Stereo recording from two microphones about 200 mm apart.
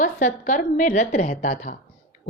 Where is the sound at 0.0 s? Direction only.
40° left (ahead or behind).